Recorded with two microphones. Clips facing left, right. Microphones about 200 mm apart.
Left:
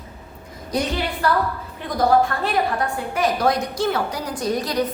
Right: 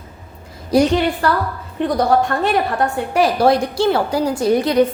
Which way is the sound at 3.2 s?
30° right (ahead or behind).